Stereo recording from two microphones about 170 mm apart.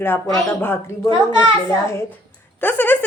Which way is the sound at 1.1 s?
30° right (ahead or behind).